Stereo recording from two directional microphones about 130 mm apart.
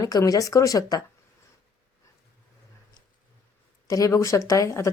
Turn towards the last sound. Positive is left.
turn(degrees=25)  # may be behind; listen again after turning